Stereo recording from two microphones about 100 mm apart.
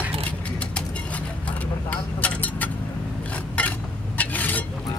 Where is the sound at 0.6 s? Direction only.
15° left (ahead or behind).